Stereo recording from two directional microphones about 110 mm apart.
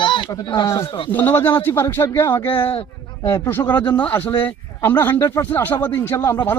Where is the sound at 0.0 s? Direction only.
45° left (ahead or behind).